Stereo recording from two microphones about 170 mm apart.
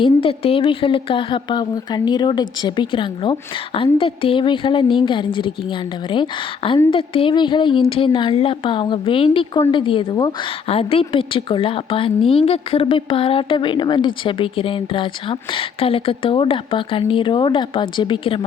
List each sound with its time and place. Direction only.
0.0 s a woman's voice: 30° left (ahead or behind)
6.9 s a woman's voice: 30° left (ahead or behind)